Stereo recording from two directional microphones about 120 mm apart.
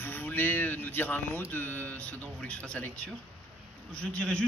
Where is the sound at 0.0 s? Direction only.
15° left (ahead or behind).